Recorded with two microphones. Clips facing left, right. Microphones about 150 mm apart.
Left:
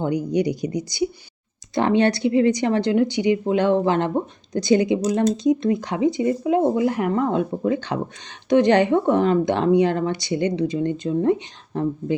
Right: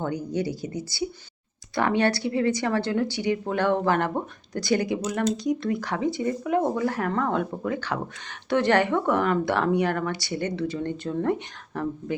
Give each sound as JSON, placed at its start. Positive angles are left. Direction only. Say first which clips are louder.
{"t": 0.0, "sound": "speech", "louder": "left 6 dB", "side_deg": 15}